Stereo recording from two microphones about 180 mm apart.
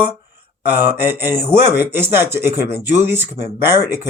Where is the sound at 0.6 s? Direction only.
10° right (ahead or behind).